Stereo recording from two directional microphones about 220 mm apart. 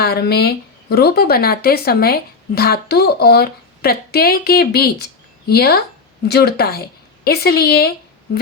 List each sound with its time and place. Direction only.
0.0 s speech: 45° left (ahead or behind)